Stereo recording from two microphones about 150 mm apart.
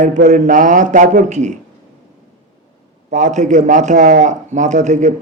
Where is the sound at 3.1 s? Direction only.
55° right (ahead or behind).